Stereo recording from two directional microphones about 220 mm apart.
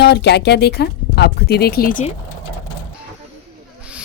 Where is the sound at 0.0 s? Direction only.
50° left (ahead or behind).